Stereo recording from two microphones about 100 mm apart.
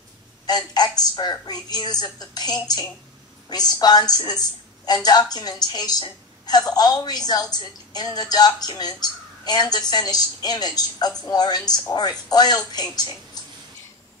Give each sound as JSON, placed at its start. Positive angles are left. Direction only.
{"t": 0.5, "sound": "a woman's voice", "side_deg": 45}